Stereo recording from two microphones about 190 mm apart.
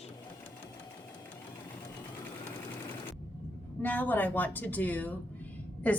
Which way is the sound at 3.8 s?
10° left (ahead or behind).